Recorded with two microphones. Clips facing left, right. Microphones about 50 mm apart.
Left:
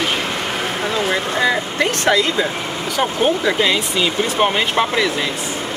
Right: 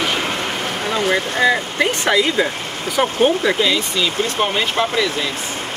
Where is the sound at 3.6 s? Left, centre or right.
Centre.